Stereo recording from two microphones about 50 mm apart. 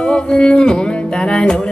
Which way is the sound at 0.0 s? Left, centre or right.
Centre.